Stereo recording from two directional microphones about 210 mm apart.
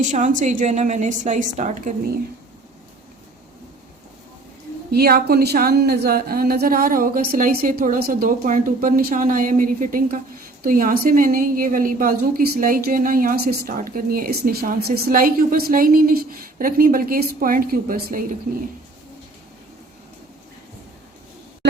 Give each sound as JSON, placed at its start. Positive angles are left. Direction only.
{"t": 0.0, "sound": "a woman's voice", "side_deg": -35}
{"t": 4.9, "sound": "a woman's voice", "side_deg": -50}